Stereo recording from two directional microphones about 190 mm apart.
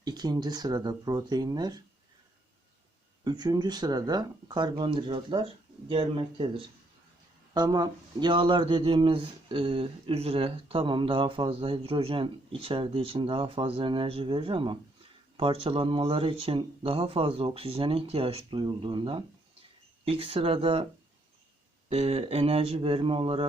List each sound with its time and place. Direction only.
0.0 s speech: 20° right (ahead or behind)
3.2 s speech: 20° right (ahead or behind)
21.8 s speech: 30° right (ahead or behind)